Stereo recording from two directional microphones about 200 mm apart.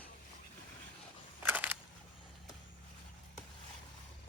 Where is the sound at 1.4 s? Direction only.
10° right (ahead or behind).